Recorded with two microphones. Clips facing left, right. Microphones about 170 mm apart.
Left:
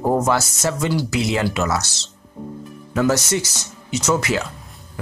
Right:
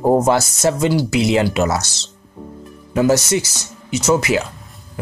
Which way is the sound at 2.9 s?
10° right (ahead or behind).